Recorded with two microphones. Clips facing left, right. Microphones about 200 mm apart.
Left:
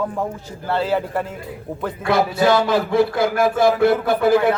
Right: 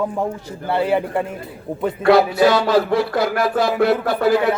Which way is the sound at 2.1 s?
50° left (ahead or behind).